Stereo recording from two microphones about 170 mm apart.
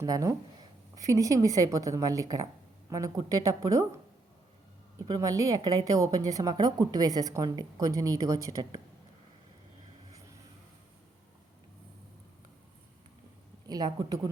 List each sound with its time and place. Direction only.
0.0 s speech: 20° right (ahead or behind)
4.9 s speech: 20° right (ahead or behind)
13.7 s speech: 25° right (ahead or behind)